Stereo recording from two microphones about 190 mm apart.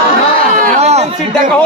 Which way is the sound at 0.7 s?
35° right (ahead or behind).